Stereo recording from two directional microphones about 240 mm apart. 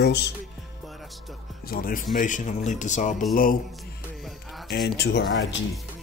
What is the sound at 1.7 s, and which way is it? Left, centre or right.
Speech, left.